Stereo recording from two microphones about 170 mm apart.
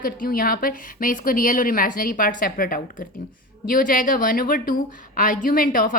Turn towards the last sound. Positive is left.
turn(degrees=55)  # may be behind; listen again after turning